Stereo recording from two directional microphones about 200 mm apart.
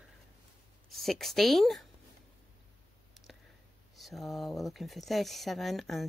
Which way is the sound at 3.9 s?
Centre (ahead or behind).